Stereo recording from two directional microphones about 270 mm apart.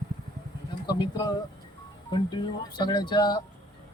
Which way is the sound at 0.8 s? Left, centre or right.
Centre.